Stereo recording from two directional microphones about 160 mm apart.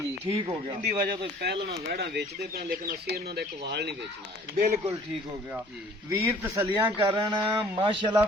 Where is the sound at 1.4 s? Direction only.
90° right.